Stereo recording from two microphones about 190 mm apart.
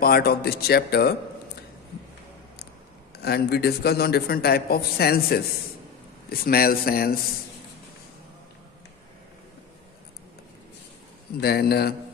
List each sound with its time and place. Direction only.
0.0 s a man's voice: 50° left (ahead or behind)
3.2 s a man's voice: 55° left (ahead or behind)
11.3 s a man's voice: 55° left (ahead or behind)